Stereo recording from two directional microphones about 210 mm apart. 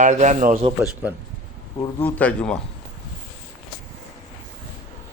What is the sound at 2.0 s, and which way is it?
Speech, 5° left (ahead or behind).